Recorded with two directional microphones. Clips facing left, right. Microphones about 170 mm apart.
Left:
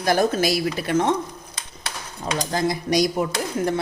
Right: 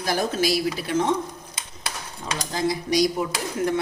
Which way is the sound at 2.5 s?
50° left (ahead or behind).